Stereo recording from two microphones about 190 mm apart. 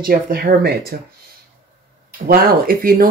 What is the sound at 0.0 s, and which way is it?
Speech, 50° right (ahead or behind).